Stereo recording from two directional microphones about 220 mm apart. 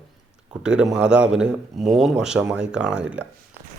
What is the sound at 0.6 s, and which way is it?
A man's voice, 5° right (ahead or behind).